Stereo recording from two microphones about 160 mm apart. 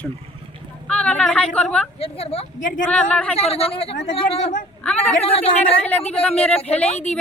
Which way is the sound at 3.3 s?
35° left (ahead or behind).